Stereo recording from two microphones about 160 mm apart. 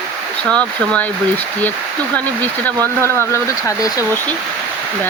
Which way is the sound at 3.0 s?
15° left (ahead or behind).